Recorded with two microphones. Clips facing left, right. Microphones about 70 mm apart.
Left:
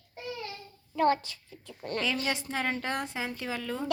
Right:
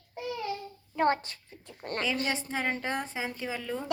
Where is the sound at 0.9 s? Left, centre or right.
Right.